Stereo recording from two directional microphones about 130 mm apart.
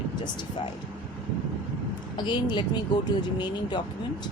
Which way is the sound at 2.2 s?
35° left (ahead or behind).